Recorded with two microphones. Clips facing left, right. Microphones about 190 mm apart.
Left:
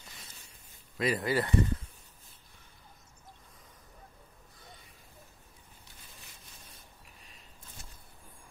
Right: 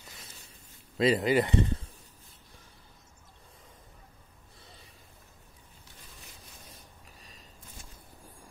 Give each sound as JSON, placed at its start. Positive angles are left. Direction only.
{"t": 0.9, "sound": "speech", "side_deg": -25}